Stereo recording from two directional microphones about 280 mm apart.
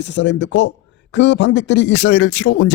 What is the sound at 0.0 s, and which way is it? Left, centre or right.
Speech, left.